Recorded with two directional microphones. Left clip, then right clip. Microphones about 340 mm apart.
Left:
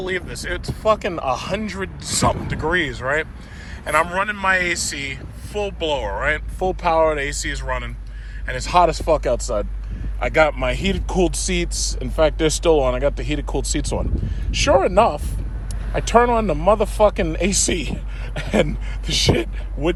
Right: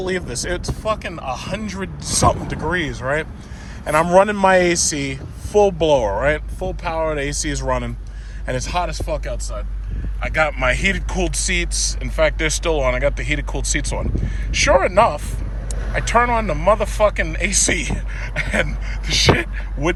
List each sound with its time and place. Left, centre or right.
0.0 s speech: centre
1.0 s speech: centre